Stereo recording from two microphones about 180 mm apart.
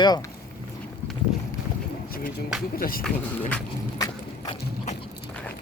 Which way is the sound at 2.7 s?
55° left (ahead or behind).